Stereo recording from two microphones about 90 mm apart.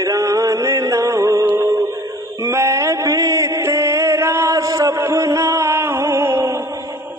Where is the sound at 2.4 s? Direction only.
30° right (ahead or behind).